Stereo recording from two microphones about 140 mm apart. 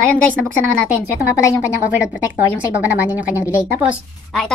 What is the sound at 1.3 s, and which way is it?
Speech, 20° left (ahead or behind).